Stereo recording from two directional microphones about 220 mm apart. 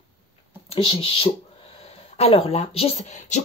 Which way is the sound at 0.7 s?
25° left (ahead or behind).